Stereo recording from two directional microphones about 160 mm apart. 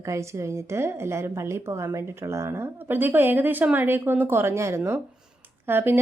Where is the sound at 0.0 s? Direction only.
20° right (ahead or behind).